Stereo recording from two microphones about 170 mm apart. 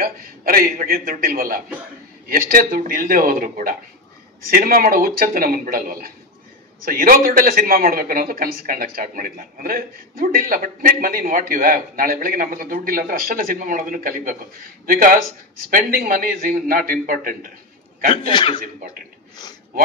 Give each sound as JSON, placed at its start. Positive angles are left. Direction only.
{"t": 0.0, "sound": "a man's voice", "side_deg": -60}
{"t": 18.3, "sound": "speech", "side_deg": 30}